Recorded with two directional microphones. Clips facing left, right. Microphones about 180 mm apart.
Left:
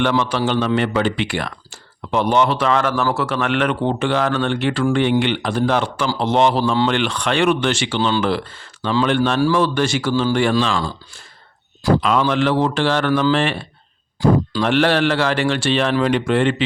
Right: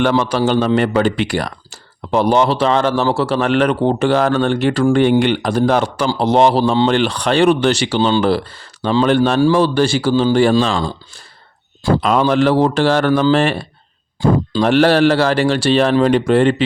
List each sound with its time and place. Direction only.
0.0 s speech: 40° right (ahead or behind)
11.9 s speech: 40° right (ahead or behind)